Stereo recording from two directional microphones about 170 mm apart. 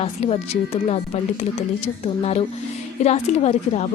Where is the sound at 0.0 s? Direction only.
35° left (ahead or behind).